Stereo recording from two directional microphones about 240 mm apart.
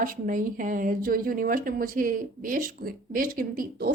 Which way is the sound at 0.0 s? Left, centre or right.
Right.